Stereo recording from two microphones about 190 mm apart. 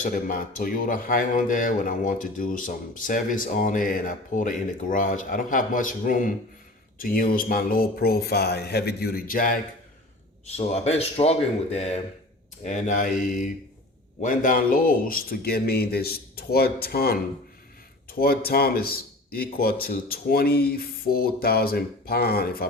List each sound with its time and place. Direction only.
0.0 s speech: 45° left (ahead or behind)
10.4 s a man's voice: 35° left (ahead or behind); by 22.6 s 55° left (ahead or behind)